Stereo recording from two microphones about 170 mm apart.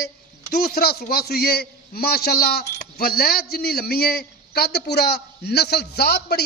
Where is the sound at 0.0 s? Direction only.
70° left (ahead or behind).